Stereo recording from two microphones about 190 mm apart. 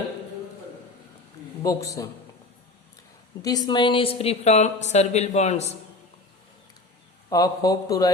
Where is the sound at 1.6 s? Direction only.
15° left (ahead or behind).